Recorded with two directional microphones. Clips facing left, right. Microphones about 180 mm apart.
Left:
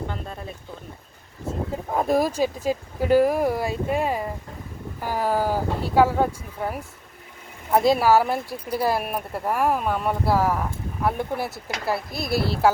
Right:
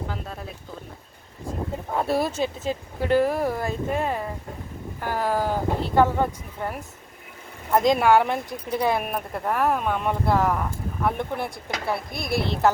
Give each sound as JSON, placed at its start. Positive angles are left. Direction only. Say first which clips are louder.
{"t": 0.1, "sound": "speech", "louder": "left 1 dB", "side_deg": 0}
{"t": 1.9, "sound": "speech", "louder": "left 3 dB", "side_deg": 10}